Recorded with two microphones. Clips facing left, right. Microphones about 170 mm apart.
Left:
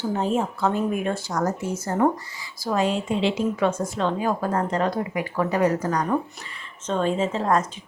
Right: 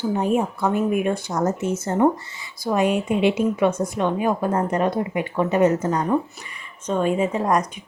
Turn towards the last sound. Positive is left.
turn(degrees=-15)  # may be behind; listen again after turning